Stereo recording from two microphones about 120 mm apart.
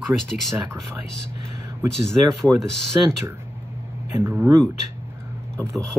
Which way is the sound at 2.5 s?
5° left (ahead or behind).